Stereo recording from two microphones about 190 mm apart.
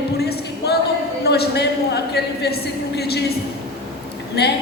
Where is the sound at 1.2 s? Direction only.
60° left (ahead or behind).